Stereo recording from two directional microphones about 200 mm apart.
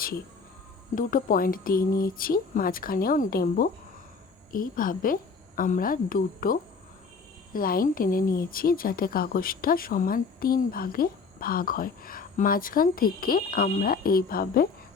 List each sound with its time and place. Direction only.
0.9 s a woman's voice: 45° left (ahead or behind)